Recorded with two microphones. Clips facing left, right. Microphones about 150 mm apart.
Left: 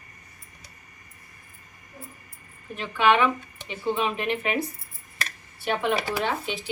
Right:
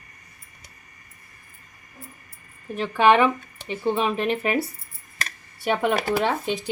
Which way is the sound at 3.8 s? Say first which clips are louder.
Right 3 dB; 35° right (ahead or behind).